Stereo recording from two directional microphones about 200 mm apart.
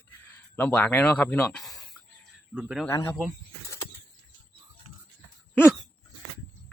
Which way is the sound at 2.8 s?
15° left (ahead or behind).